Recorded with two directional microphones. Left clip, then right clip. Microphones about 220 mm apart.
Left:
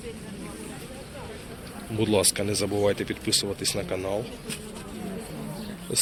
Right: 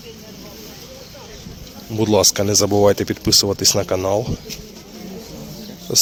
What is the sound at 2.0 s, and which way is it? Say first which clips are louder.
Speech: right 9 dB; 35° right (ahead or behind).